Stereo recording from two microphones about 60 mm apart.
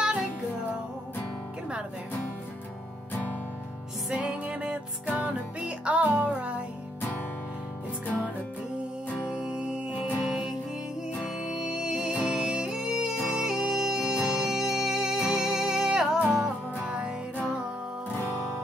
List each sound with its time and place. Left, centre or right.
4.1 s music: centre
9.3 s music: centre